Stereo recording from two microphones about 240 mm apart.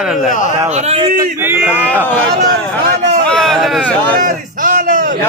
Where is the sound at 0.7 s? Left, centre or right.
Right.